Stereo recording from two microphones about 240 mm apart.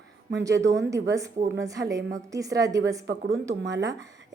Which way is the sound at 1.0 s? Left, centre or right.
Centre.